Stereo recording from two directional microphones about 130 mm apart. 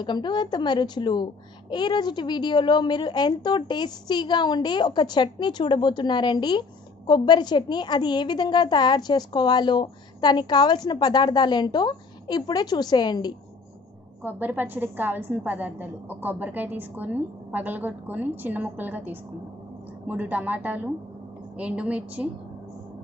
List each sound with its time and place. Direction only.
0.0 s a child's voice: 35° left (ahead or behind)
14.2 s a woman's voice: 15° right (ahead or behind)